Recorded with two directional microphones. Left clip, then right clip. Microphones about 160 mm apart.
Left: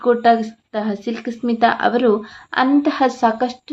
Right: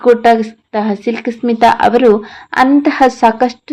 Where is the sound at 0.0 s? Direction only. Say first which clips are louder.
Right 6 dB; 15° right (ahead or behind).